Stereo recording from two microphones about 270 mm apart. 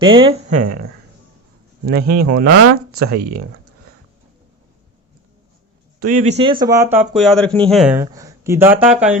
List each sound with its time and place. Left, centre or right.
0.0 s speech: centre
1.9 s speech: right
6.0 s speech: right; by 9.1 s centre